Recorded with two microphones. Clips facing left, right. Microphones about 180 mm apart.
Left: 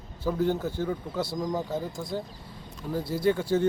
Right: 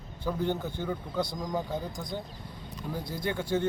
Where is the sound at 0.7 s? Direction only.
5° left (ahead or behind).